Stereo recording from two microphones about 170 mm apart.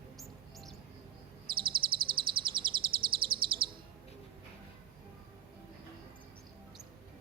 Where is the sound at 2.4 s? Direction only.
60° right (ahead or behind).